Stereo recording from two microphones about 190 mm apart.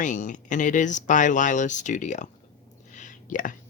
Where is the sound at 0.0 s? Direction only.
40° left (ahead or behind).